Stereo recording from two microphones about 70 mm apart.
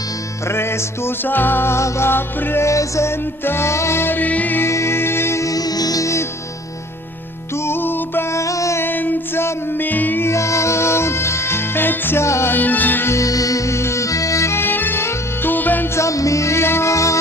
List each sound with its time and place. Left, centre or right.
0.4 s music: left
2.6 s music: left
4.6 s music: left
7.5 s music: left
8.3 s music: left
8.8 s music: left
12.5 s music: left
13.1 s music: left
16.0 s music: left